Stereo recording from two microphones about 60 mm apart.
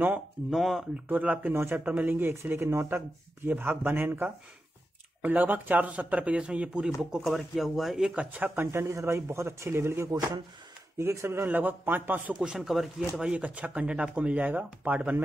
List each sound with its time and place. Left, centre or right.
0.5 s speech: centre
1.0 s speech: right
1.5 s speech: right
1.9 s speech: right
3.4 s speech: right; by 7.2 s centre
7.2 s speech: centre
8.1 s speech: right
8.7 s speech: right
11.4 s speech: right
12.4 s speech: centre
12.6 s speech: centre
13.2 s speech: centre